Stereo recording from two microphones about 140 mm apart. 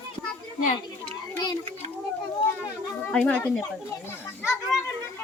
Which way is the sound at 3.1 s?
5° left (ahead or behind).